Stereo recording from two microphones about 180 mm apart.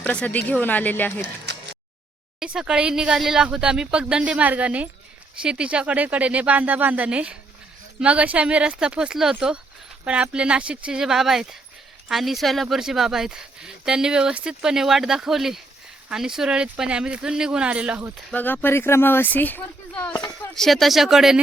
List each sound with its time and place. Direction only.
0.0 s speech: 10° left (ahead or behind)
1.5 s a sound: 70° right (ahead or behind)
2.4 s speech: 5° right (ahead or behind)
18.3 s speech: 10° left (ahead or behind)